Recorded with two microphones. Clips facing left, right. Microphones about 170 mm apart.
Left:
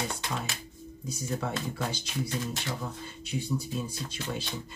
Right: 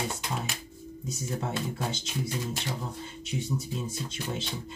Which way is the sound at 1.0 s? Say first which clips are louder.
Left 1 dB; 20° right (ahead or behind).